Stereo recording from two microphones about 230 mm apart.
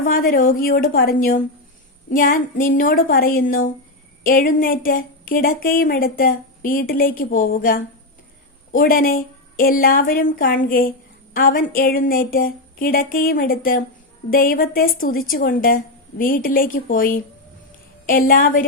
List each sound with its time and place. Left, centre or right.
0.0 s speech: left